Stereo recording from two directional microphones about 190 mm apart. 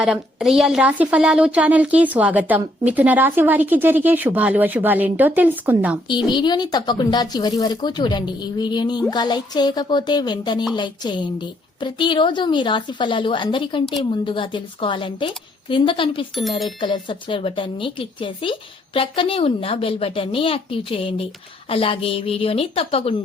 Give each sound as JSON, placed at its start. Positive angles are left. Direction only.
{"t": 0.0, "sound": "speech", "side_deg": -5}
{"t": 6.1, "sound": "a woman's voice", "side_deg": 25}
{"t": 16.3, "sound": "speech", "side_deg": 0}
{"t": 16.8, "sound": "a woman's voice", "side_deg": 25}